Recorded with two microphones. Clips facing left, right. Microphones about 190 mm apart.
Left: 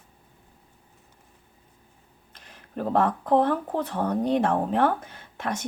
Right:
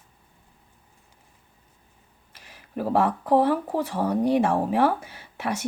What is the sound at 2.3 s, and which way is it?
Speech, 10° right (ahead or behind).